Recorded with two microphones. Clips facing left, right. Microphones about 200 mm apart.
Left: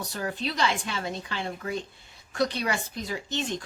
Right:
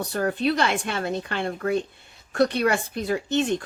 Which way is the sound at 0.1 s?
55° right (ahead or behind).